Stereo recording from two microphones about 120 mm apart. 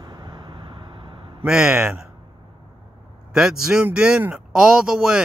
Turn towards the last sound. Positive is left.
turn(degrees=-5)  # may be behind; listen again after turning